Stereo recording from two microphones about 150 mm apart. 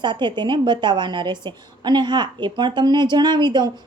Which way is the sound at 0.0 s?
30° right (ahead or behind).